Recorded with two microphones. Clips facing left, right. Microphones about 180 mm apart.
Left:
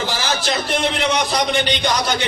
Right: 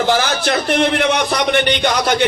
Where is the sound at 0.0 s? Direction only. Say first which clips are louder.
Right 6 dB; 55° right (ahead or behind).